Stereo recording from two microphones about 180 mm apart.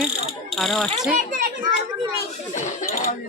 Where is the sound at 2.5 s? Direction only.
45° left (ahead or behind).